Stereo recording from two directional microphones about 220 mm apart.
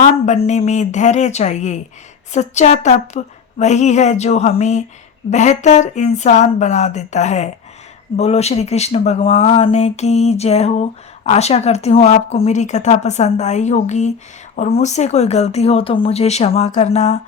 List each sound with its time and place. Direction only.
0.3 s a woman's voice: 30° left (ahead or behind)